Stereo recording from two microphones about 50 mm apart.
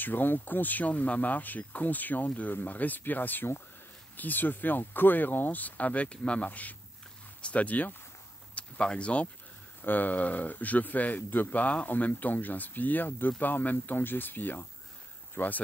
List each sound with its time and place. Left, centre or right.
0.0 s speech: left
8.5 s speech: left
9.8 s speech: left